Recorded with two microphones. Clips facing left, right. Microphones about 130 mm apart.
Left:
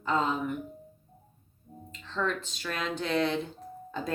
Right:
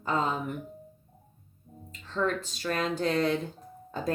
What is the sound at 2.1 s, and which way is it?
Speech, 40° right (ahead or behind).